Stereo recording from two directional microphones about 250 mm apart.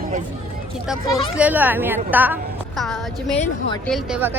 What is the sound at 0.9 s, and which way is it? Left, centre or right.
A woman's voice, centre.